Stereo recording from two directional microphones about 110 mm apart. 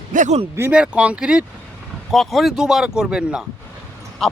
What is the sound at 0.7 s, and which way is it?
Speech, 10° right (ahead or behind).